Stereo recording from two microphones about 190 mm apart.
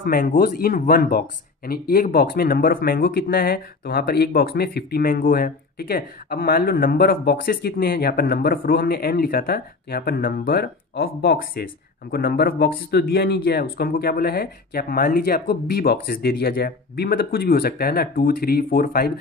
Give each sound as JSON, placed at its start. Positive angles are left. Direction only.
{"t": 0.0, "sound": "speech", "side_deg": 45}